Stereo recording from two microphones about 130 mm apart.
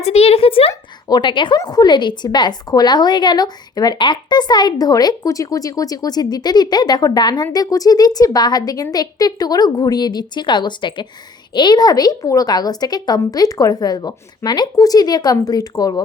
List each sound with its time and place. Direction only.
0.0 s speech: 55° left (ahead or behind)
0.7 s a woman's voice: 30° left (ahead or behind)